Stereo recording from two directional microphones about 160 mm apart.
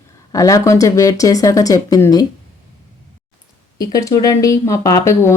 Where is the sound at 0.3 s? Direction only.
20° left (ahead or behind).